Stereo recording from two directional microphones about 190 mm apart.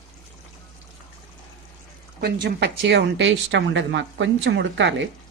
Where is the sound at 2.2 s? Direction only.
65° right (ahead or behind).